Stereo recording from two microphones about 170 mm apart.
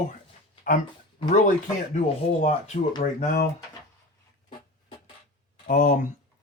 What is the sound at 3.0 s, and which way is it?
Speech, 55° left (ahead or behind).